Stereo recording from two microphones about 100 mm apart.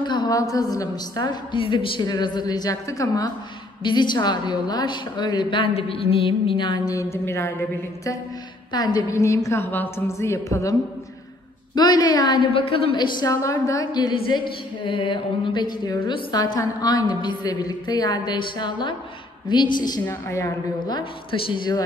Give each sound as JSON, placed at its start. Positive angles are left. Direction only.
{"t": 0.0, "sound": "a sound", "side_deg": 50}
{"t": 0.3, "sound": "a woman's voice", "side_deg": 35}
{"t": 3.8, "sound": "speech", "side_deg": 50}
{"t": 8.7, "sound": "speech", "side_deg": 45}
{"t": 9.1, "sound": "a woman's voice", "side_deg": 30}
{"t": 11.7, "sound": "speech", "side_deg": 45}
{"t": 12.5, "sound": "a woman's voice", "side_deg": 75}
{"t": 12.9, "sound": "a woman's voice", "side_deg": 45}
{"t": 14.1, "sound": "speech", "side_deg": 55}
{"t": 20.2, "sound": "a woman's voice", "side_deg": 30}
{"t": 20.9, "sound": "speech", "side_deg": 60}